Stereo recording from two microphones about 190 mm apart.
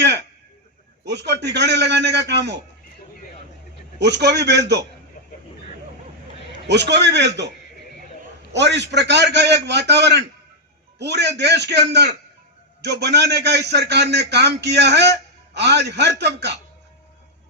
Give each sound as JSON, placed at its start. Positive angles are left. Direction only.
{"t": 0.0, "sound": "a sound", "side_deg": -65}
{"t": 1.0, "sound": "a man's voice", "side_deg": -65}
{"t": 4.0, "sound": "a man's voice", "side_deg": -65}
{"t": 6.7, "sound": "a man's voice", "side_deg": -65}
{"t": 8.5, "sound": "a man's voice", "side_deg": -65}